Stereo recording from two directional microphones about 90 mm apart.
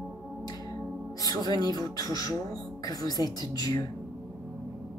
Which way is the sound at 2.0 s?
40° left (ahead or behind).